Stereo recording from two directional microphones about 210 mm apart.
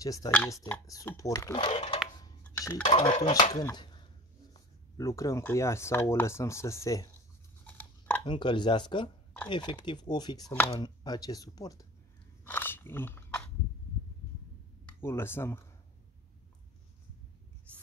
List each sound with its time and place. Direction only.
0.0 s speech: 15° left (ahead or behind)
1.6 s speech: 25° left (ahead or behind)
2.4 s dishes: 15° left (ahead or behind)
2.9 s speech: 25° left (ahead or behind)
3.5 s speech: 20° left (ahead or behind)
7.6 s a sound: 10° left (ahead or behind)
8.3 s speech: 20° left (ahead or behind)
12.4 s chewing: 10° left (ahead or behind)
14.9 s speech: 10° left (ahead or behind)